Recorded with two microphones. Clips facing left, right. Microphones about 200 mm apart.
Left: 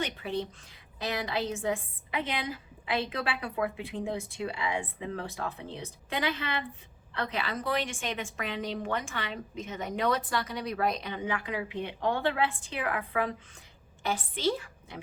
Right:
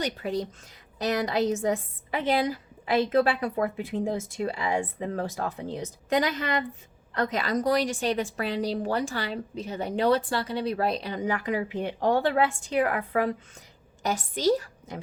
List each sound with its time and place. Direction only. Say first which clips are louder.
0.0 s a woman's voice: right 4 dB; 40° right (ahead or behind)
14.0 s a woman's voice: right 4 dB; 40° right (ahead or behind)